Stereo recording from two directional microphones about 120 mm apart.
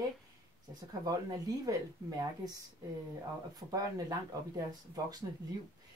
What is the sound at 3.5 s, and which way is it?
Speech, 30° right (ahead or behind).